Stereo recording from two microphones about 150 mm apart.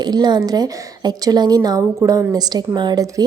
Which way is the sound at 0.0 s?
25° right (ahead or behind).